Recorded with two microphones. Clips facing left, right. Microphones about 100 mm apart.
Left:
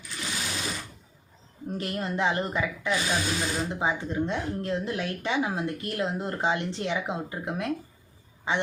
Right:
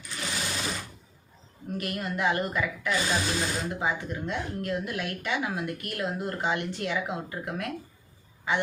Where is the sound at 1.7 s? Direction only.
25° left (ahead or behind).